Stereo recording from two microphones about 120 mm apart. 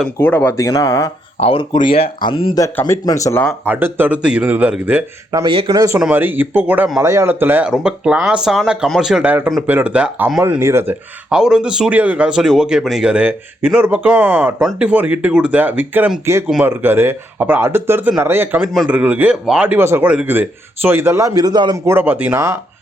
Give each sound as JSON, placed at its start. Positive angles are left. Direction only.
{"t": 0.2, "sound": "speech", "side_deg": 15}
{"t": 0.5, "sound": "speech", "side_deg": 30}
{"t": 1.4, "sound": "speech", "side_deg": 55}
{"t": 3.1, "sound": "speech", "side_deg": 25}
{"t": 3.7, "sound": "speech", "side_deg": -15}
{"t": 5.5, "sound": "speech", "side_deg": -50}
{"t": 5.7, "sound": "speech", "side_deg": -30}
{"t": 6.0, "sound": "speech", "side_deg": -15}
{"t": 7.0, "sound": "speech", "side_deg": -25}
{"t": 7.7, "sound": "speech", "side_deg": -5}
{"t": 10.6, "sound": "speech", "side_deg": -20}
{"t": 11.3, "sound": "speech", "side_deg": -5}
{"t": 21.8, "sound": "speech", "side_deg": -15}